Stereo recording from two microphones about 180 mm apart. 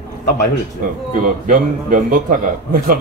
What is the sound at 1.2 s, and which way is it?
Speech, 50° right (ahead or behind).